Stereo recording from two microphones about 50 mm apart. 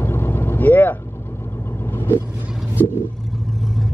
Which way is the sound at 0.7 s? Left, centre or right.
Left.